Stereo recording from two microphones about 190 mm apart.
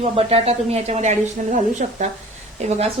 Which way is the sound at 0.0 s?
30° right (ahead or behind).